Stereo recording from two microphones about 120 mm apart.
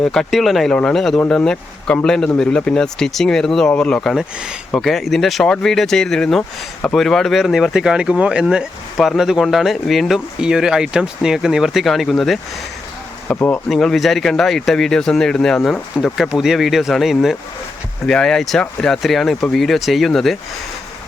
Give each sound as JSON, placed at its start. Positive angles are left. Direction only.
{"t": 0.0, "sound": "speech", "side_deg": 5}
{"t": 13.2, "sound": "speech", "side_deg": 15}
{"t": 13.7, "sound": "speech", "side_deg": 0}